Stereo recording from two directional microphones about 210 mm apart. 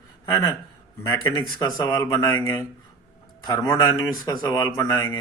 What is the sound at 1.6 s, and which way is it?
Speech, 20° left (ahead or behind).